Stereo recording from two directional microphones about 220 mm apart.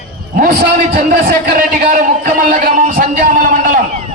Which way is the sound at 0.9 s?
40° right (ahead or behind).